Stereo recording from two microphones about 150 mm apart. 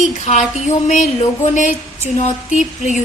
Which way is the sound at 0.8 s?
55° left (ahead or behind).